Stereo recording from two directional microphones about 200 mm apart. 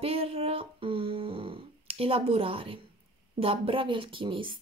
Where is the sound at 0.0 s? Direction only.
30° right (ahead or behind).